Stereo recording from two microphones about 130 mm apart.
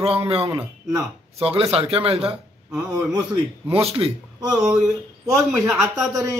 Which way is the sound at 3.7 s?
50° right (ahead or behind).